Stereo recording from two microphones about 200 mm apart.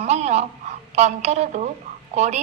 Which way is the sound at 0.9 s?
35° right (ahead or behind).